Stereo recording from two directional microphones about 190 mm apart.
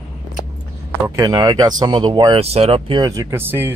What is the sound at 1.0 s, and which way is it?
Speech, 15° right (ahead or behind).